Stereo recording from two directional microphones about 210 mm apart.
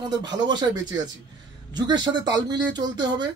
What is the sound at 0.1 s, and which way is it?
Speech, 20° right (ahead or behind).